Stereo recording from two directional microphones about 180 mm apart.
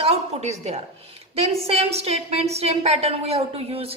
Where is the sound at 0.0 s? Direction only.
35° right (ahead or behind).